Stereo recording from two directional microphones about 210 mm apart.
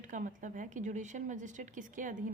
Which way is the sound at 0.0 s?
40° right (ahead or behind).